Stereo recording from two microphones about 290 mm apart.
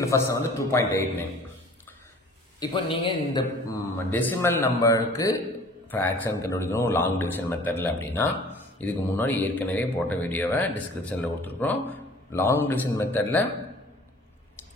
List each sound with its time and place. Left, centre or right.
0.0 s a man's voice: centre
2.6 s a man's voice: centre